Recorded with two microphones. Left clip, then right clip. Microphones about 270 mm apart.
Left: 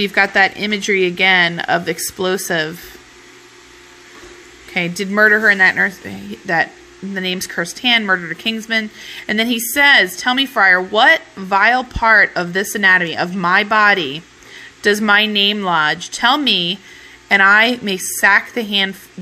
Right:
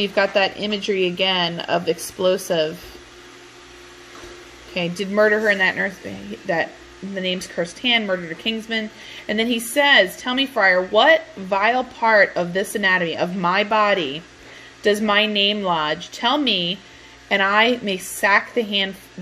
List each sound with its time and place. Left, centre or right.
0.0 s speech: left
4.7 s speech: left